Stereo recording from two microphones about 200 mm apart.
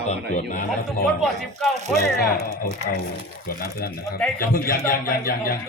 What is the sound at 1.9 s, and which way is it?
A man's voice, 50° left (ahead or behind).